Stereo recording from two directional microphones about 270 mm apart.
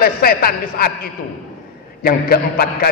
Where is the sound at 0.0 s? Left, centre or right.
Left.